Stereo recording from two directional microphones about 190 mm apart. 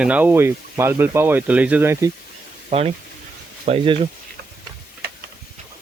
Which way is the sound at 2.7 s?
30° right (ahead or behind).